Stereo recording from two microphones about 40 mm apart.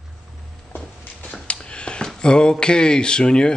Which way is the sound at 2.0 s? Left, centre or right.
Left.